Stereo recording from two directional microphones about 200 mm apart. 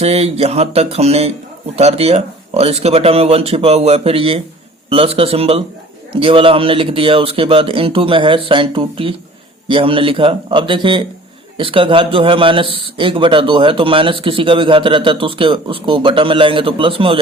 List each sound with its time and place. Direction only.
0.0 s speech: 30° right (ahead or behind)